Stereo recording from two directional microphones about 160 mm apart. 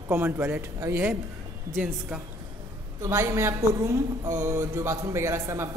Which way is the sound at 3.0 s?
20° right (ahead or behind).